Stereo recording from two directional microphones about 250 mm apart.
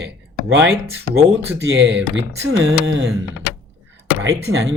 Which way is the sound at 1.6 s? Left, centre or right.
Right.